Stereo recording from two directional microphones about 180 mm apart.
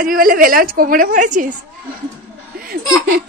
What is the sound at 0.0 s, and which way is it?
A woman's voice, 50° right (ahead or behind).